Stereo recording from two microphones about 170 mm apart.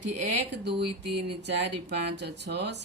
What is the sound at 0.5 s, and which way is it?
Speech, 80° right.